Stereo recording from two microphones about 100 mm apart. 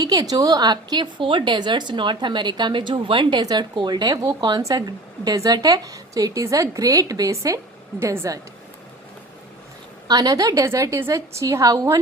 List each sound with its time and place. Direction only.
0.0 s a woman's voice: 40° right (ahead or behind)
10.1 s a woman's voice: 40° right (ahead or behind)